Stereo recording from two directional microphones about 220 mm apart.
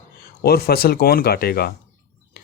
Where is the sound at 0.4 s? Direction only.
45° left (ahead or behind).